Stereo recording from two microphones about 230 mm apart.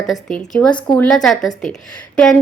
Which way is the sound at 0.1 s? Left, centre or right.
Centre.